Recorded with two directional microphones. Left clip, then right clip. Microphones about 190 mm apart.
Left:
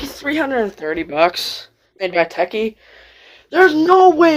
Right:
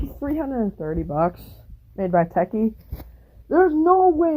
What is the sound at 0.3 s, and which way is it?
Speech, 15° left (ahead or behind).